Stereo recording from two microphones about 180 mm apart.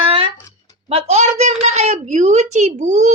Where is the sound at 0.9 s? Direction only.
35° right (ahead or behind).